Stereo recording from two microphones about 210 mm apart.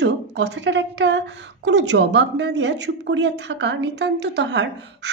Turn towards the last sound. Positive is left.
turn(degrees=-55)  # may be behind; listen again after turning